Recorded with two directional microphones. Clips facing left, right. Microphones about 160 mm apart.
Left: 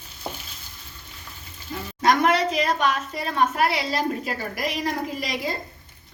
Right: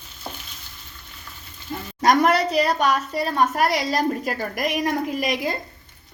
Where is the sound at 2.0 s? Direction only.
45° right (ahead or behind).